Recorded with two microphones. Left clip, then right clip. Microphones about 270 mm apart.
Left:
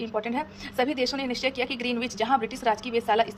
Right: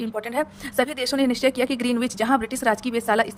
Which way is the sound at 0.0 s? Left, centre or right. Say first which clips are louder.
Right 3 dB; right.